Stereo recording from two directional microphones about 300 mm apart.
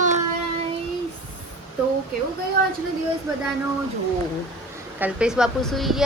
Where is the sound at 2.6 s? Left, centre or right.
Right.